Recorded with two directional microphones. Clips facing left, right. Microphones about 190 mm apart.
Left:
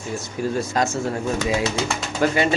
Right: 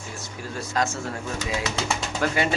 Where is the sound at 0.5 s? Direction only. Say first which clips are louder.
Left 3 dB; 15° left (ahead or behind).